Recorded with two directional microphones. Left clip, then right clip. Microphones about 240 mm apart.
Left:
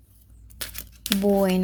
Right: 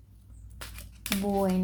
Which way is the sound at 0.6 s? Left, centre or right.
Left.